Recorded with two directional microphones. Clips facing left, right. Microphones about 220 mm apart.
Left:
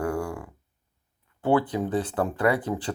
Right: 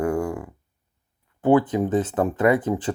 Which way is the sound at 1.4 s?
20° right (ahead or behind).